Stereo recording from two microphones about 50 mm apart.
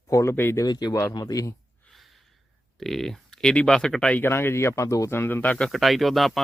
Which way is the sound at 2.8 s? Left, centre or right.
Centre.